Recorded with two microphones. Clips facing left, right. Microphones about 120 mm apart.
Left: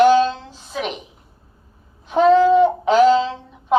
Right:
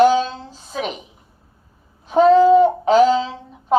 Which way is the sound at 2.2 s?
35° right (ahead or behind).